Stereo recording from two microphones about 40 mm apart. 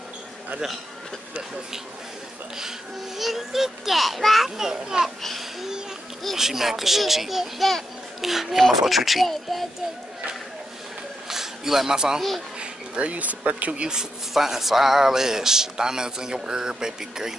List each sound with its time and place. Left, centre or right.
3.2 s a child's voice: centre
4.6 s a man's voice: centre
6.3 s a child's voice: centre
11.2 s a sound: centre
12.5 s speech: right
14.3 s a man's voice: centre